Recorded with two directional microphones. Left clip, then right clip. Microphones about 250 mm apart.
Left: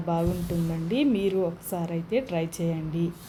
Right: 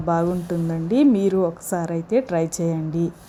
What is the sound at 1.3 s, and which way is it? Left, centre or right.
Speech, right.